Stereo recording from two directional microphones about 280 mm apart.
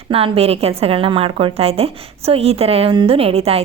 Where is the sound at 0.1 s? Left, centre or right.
Right.